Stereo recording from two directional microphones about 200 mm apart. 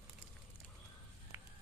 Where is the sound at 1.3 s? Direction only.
10° right (ahead or behind).